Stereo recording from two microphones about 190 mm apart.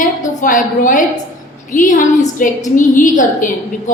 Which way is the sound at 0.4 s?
45° left (ahead or behind).